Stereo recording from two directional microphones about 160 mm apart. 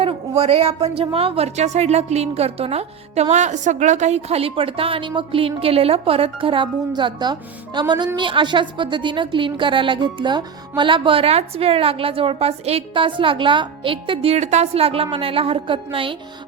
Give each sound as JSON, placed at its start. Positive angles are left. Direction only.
{"t": 0.0, "sound": "a woman's voice", "side_deg": -40}